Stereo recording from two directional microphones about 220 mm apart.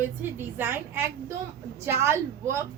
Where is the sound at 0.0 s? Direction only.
10° right (ahead or behind).